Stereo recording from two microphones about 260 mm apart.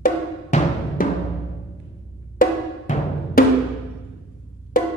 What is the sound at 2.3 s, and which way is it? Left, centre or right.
Music, left.